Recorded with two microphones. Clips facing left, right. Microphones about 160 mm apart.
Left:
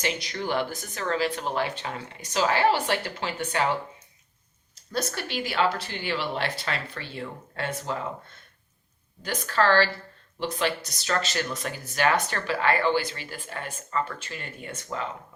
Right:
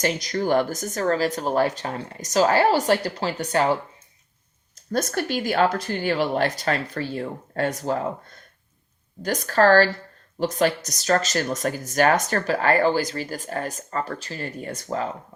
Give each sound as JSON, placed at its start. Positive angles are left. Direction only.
{"t": 0.0, "sound": "speech", "side_deg": -40}
{"t": 4.7, "sound": "speech", "side_deg": -45}